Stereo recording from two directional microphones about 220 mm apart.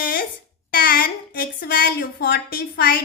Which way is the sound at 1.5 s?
45° left (ahead or behind).